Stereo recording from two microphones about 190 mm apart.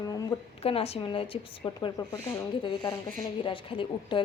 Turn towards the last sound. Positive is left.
turn(degrees=25)  # may be behind; listen again after turning